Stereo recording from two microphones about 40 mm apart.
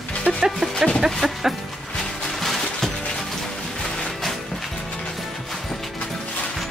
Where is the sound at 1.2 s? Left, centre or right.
Centre.